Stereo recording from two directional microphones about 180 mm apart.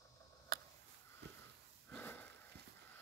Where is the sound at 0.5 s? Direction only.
60° right (ahead or behind).